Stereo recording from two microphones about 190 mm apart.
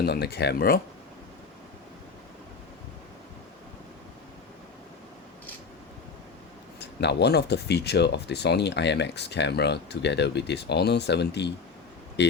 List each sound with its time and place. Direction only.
0.0 s speech: 55° left (ahead or behind)
6.7 s speech: 65° left (ahead or behind)